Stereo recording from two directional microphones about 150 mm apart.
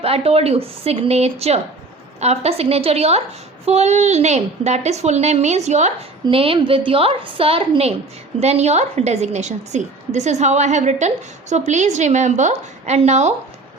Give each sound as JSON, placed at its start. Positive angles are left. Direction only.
{"t": 0.0, "sound": "a woman's voice", "side_deg": -40}
{"t": 6.2, "sound": "a woman's voice", "side_deg": -35}